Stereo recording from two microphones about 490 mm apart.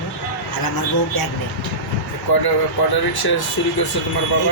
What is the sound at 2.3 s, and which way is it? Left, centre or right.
Speech, left.